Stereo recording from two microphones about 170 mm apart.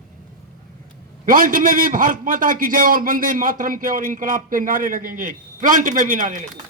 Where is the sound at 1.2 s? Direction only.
55° right (ahead or behind).